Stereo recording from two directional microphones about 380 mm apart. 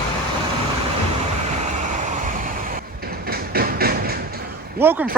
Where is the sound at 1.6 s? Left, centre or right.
Centre.